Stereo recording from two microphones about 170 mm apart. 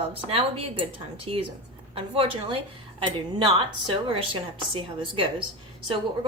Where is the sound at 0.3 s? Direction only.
35° right (ahead or behind).